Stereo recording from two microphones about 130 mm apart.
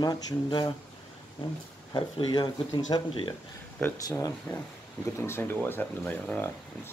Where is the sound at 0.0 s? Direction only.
30° left (ahead or behind).